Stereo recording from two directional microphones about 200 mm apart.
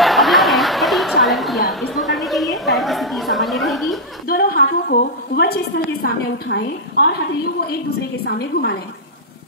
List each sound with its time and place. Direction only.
0.0 s snicker: centre (ahead or behind)
4.3 s a sound: 50° left (ahead or behind)
8.3 s a woman's voice: 55° left (ahead or behind)